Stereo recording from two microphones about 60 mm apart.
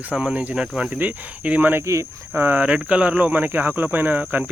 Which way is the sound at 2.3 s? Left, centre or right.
Right.